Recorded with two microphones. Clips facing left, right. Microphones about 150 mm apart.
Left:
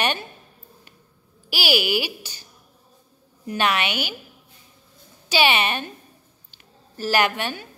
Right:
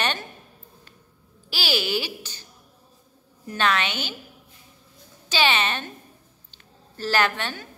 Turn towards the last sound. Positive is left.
turn(degrees=10)  # may be behind; listen again after turning